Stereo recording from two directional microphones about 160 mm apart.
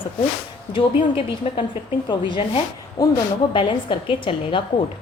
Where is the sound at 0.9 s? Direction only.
35° left (ahead or behind).